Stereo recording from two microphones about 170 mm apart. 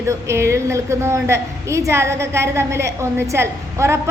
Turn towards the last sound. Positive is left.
turn(degrees=-15)  # may be behind; listen again after turning